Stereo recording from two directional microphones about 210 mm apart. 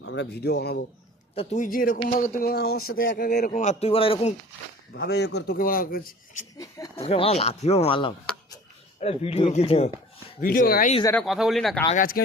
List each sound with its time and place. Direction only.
0.0 s speech: 60° left (ahead or behind)
1.4 s speech: 35° left (ahead or behind)
4.9 s speech: 50° left (ahead or behind)
6.9 s speech: 30° left (ahead or behind)
10.4 s speech: 45° left (ahead or behind)
11.0 s speech: 5° left (ahead or behind)
11.9 s speech: 40° left (ahead or behind)